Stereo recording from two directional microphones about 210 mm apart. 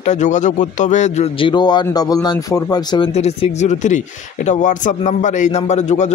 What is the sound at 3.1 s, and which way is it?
Speech, 30° left (ahead or behind).